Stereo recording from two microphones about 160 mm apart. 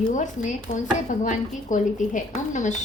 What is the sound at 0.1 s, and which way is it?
Speech, 50° left (ahead or behind).